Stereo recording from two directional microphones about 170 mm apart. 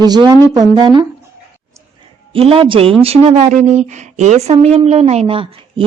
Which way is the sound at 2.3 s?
35° right (ahead or behind).